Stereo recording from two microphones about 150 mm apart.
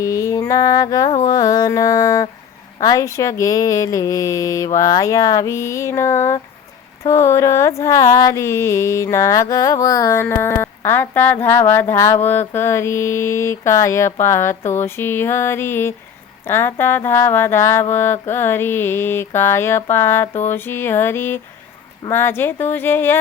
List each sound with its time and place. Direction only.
0.0 s music: 20° left (ahead or behind)
1.3 s speech: 25° left (ahead or behind)
7.8 s mantra: 20° left (ahead or behind)